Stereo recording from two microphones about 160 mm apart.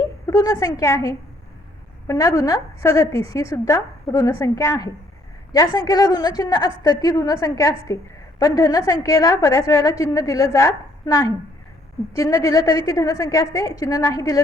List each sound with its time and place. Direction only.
0.3 s a woman's voice: 20° left (ahead or behind)